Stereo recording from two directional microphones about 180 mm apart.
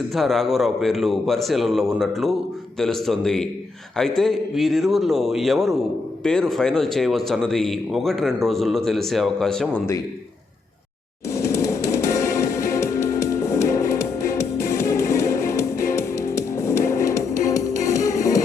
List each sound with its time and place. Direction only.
0.1 s speech: centre (ahead or behind)
11.3 s music: 15° left (ahead or behind)